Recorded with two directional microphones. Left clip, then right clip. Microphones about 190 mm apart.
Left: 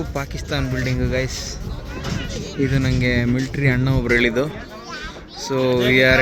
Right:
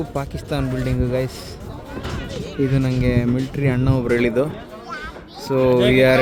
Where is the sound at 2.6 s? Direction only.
5° right (ahead or behind).